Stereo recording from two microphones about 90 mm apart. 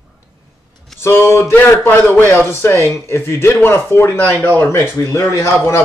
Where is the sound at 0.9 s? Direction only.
25° left (ahead or behind).